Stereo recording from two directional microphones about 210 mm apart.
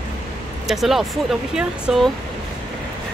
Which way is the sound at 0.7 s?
Centre (ahead or behind).